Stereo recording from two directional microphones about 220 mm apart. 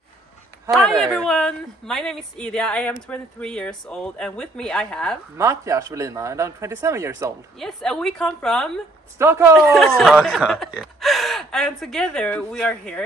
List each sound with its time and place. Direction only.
0.7 s speech: centre (ahead or behind)
5.4 s speech: 15° right (ahead or behind)
7.5 s speech: centre (ahead or behind)
9.2 s speech: 10° right (ahead or behind)
9.6 s speech: centre (ahead or behind)